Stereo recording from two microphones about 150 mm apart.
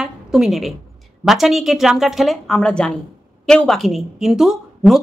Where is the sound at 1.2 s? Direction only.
Centre (ahead or behind).